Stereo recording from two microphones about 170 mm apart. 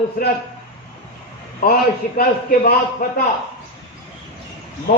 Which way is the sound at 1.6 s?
55° left (ahead or behind).